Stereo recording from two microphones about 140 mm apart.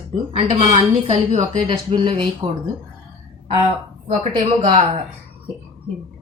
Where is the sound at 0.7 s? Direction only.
55° right (ahead or behind).